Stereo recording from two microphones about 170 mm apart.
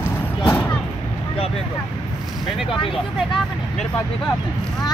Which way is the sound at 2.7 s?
30° left (ahead or behind).